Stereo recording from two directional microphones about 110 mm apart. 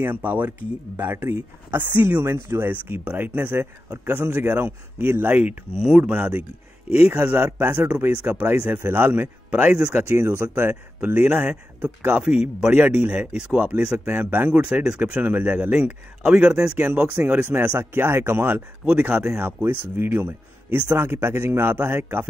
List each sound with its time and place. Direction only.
0.0 s speech: 15° right (ahead or behind)